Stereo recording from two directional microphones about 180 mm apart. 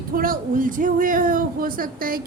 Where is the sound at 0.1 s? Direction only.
50° right (ahead or behind).